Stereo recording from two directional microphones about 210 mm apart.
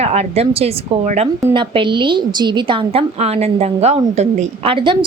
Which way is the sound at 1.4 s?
20° right (ahead or behind).